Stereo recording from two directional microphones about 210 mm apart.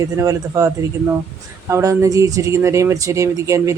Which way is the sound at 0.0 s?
15° right (ahead or behind).